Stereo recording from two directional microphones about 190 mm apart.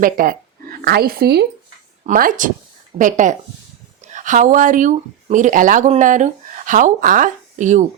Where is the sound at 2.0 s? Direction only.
45° right (ahead or behind).